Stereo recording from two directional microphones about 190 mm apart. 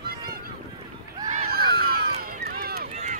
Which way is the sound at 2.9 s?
40° right (ahead or behind).